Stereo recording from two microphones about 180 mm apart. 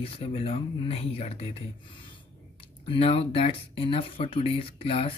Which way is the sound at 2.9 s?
30° left (ahead or behind).